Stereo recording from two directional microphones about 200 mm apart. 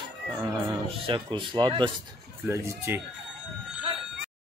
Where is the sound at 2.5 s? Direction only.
10° right (ahead or behind).